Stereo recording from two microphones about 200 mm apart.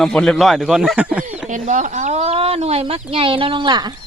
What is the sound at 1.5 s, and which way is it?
Speech, 40° right (ahead or behind).